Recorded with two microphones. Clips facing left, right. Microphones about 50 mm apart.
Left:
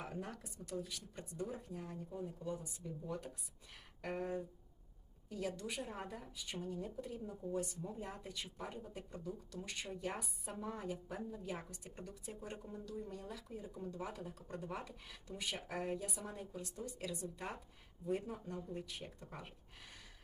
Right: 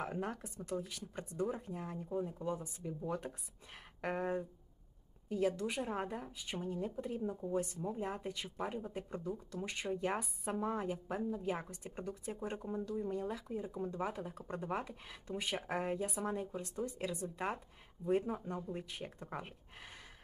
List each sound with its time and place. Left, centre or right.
0.0 s speech: right